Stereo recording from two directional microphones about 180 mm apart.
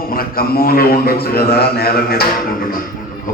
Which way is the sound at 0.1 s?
55° left (ahead or behind).